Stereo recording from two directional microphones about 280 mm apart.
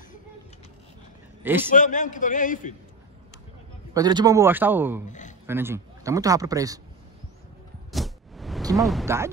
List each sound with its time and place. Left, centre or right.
1.4 s a man's voice: centre
1.7 s a man's voice: left
3.9 s speech: centre
5.0 s speech: left
5.5 s speech: centre
7.9 s a sound: centre
8.8 s speech: centre